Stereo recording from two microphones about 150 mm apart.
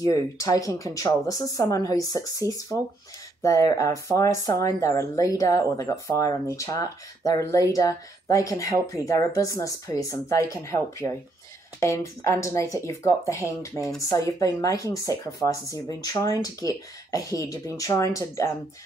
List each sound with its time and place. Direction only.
0.0 s speech: 20° left (ahead or behind)